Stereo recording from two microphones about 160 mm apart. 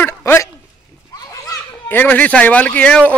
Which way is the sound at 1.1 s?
20° left (ahead or behind).